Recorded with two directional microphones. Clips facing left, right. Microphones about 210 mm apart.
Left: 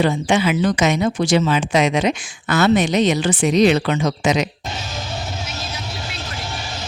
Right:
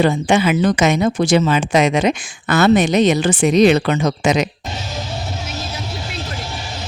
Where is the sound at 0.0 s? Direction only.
50° right (ahead or behind).